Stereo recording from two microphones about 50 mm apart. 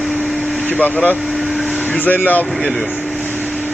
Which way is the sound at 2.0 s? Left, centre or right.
Left.